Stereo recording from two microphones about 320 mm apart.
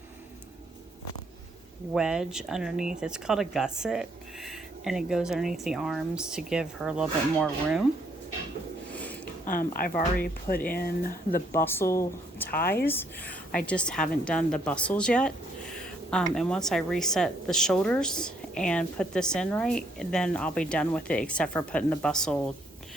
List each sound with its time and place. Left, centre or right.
1.9 s speech: centre
8.9 s a sound: centre
9.5 s a woman's voice: left
11.5 s speech: centre